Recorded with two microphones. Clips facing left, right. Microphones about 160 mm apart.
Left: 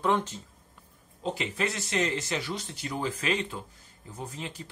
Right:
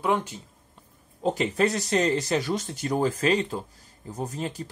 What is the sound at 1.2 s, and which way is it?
Speech, 45° right (ahead or behind).